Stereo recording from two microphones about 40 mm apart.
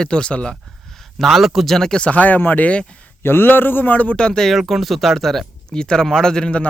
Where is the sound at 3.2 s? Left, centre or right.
Left.